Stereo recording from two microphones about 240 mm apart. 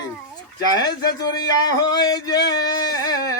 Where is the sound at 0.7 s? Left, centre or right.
Centre.